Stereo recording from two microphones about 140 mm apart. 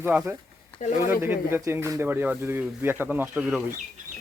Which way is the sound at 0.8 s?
55° left (ahead or behind).